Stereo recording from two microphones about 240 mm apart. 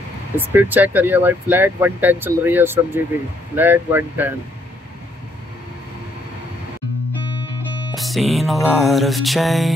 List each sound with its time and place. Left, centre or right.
0.4 s speech: centre
7.9 s music: centre